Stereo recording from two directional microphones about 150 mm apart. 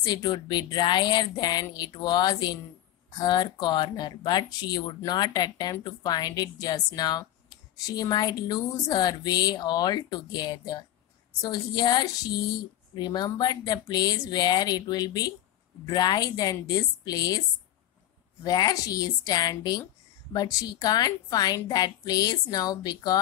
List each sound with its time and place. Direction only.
0.0 s speech: 30° left (ahead or behind)
18.4 s speech: 25° left (ahead or behind)